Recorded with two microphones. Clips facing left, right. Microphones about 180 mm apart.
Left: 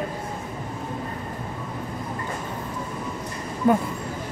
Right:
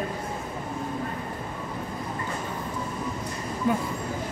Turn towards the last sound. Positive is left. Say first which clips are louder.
# left 6 dB
turn(degrees=55)  # may be behind; listen again after turning